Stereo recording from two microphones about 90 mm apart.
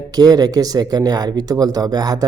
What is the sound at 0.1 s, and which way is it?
Speech, 45° right (ahead or behind).